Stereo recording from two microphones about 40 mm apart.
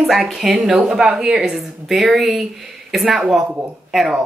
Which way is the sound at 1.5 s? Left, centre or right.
Centre.